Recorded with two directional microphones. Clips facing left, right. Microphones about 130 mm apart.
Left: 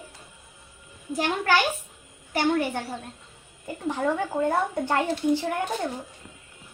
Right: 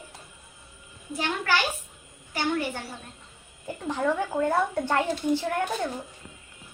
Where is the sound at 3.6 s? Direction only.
10° left (ahead or behind).